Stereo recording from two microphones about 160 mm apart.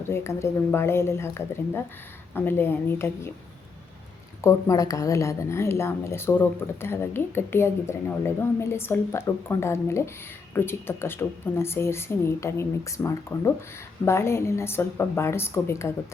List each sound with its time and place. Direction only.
0.1 s a woman's voice: 15° left (ahead or behind)
4.4 s a woman's voice: 20° left (ahead or behind)